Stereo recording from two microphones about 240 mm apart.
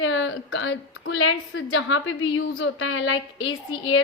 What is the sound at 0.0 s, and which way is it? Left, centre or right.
A woman's voice, left.